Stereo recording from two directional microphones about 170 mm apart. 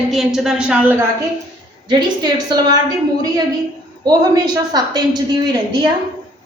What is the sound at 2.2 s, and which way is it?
A woman's voice, 25° right (ahead or behind).